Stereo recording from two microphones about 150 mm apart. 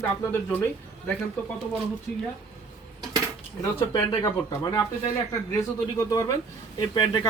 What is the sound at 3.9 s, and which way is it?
Speech, 20° left (ahead or behind).